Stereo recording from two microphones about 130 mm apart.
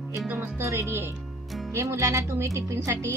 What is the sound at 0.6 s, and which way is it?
Speech, 20° right (ahead or behind).